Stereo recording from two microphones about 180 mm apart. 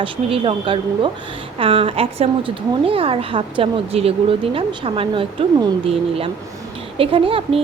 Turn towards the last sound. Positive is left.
turn(degrees=-30)  # may be behind; listen again after turning